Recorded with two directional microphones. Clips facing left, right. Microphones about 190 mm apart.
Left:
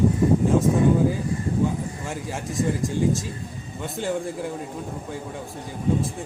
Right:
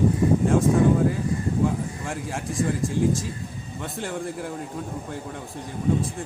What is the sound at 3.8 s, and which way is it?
Speech, centre (ahead or behind).